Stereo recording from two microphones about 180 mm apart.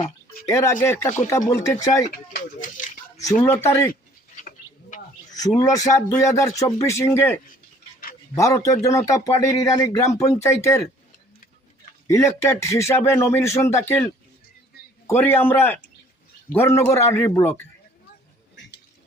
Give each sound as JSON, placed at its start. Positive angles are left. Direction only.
{"t": 0.4, "sound": "a man's voice", "side_deg": 15}
{"t": 2.0, "sound": "speech", "side_deg": 50}
{"t": 3.4, "sound": "a man's voice", "side_deg": 15}
{"t": 4.4, "sound": "a sound", "side_deg": 45}
{"t": 5.4, "sound": "a man's voice", "side_deg": 20}
{"t": 8.4, "sound": "a man's voice", "side_deg": 15}
{"t": 12.0, "sound": "a man's voice", "side_deg": 15}